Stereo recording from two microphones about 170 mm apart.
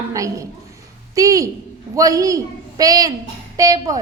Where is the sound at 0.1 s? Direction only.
20° right (ahead or behind).